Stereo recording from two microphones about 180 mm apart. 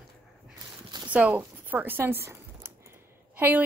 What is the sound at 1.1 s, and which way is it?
A woman's voice, 10° right (ahead or behind).